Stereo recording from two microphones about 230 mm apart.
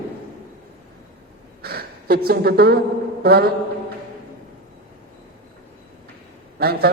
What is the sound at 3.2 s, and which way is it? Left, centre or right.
Mantra, right.